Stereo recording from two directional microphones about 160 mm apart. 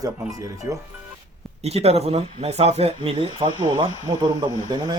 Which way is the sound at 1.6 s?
40° right (ahead or behind).